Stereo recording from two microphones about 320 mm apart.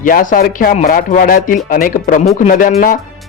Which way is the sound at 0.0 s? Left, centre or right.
Left.